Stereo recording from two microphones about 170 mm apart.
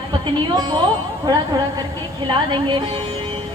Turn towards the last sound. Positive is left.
turn(degrees=-30)  # may be behind; listen again after turning